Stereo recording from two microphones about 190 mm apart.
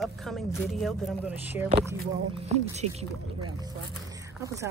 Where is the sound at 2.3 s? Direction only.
35° right (ahead or behind).